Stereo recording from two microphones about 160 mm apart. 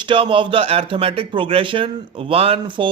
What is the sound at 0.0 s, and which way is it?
Speech, 30° right (ahead or behind).